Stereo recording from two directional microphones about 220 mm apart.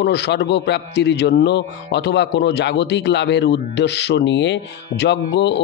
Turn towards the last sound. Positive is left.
turn(degrees=50)  # may be behind; listen again after turning